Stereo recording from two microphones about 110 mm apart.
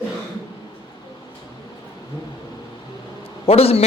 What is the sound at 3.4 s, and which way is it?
Speech, 65° left (ahead or behind).